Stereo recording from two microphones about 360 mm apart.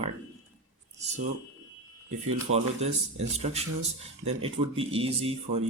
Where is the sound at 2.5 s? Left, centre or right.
Centre.